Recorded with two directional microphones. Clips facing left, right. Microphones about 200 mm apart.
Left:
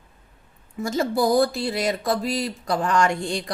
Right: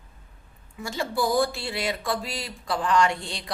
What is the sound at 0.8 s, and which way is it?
Speech, 40° left (ahead or behind).